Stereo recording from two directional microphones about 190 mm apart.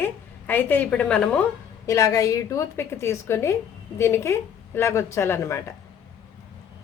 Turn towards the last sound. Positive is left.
turn(degrees=15)  # may be behind; listen again after turning